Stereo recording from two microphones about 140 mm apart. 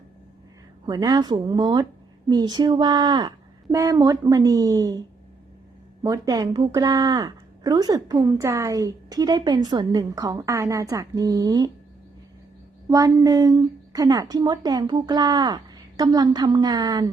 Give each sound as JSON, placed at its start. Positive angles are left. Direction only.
{"t": 0.9, "sound": "a woman's voice", "side_deg": -30}
{"t": 12.9, "sound": "a woman's voice", "side_deg": -25}